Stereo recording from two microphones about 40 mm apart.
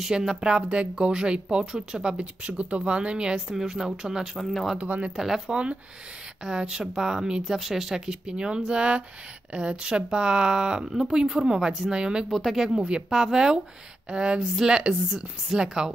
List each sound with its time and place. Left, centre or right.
0.0 s speech: centre
2.4 s speech: right; by 4.3 s centre
4.4 s speech: centre
4.7 s speech: right
5.1 s speech: centre
5.5 s speech: right
7.4 s speech: centre
12.3 s speech: centre
12.7 s speech: right
14.5 s speech: centre